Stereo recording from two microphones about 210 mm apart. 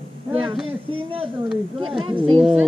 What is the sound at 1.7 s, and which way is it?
Speech, 25° right (ahead or behind).